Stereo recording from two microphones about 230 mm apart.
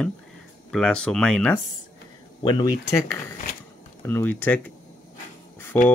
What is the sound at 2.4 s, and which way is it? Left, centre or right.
Speech, left.